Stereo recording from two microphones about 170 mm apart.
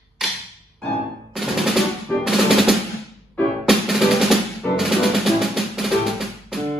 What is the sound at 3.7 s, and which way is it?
Music, centre (ahead or behind).